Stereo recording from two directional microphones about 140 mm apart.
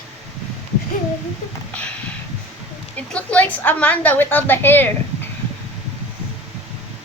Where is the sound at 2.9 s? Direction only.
10° left (ahead or behind).